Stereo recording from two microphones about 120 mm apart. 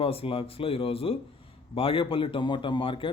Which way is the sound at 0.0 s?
50° left (ahead or behind).